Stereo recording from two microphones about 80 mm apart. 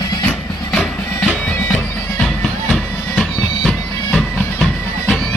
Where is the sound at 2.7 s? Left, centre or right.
Centre.